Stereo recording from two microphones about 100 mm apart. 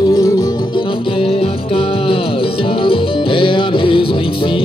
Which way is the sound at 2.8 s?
60° left (ahead or behind).